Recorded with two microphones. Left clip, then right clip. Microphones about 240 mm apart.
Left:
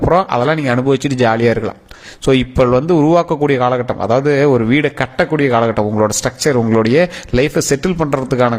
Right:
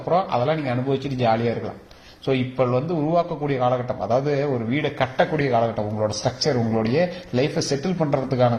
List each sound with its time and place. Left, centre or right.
0.1 s a man's voice: left